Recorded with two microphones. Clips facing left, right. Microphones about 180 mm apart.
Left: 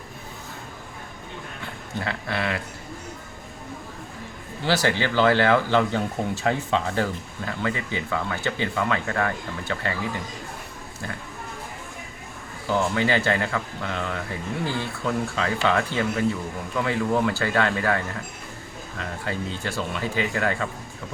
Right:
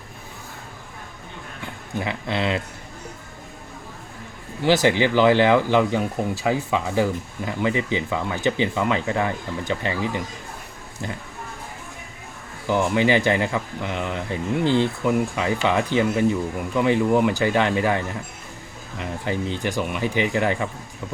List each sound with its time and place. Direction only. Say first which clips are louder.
2.0 s speech: right 3 dB; 20° right (ahead or behind)
4.6 s speech: right 5 dB; 15° right (ahead or behind)
12.6 s speech: right 3 dB; 15° right (ahead or behind)